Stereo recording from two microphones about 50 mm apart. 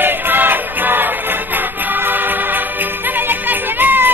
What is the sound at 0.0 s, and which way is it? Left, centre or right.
Music, right.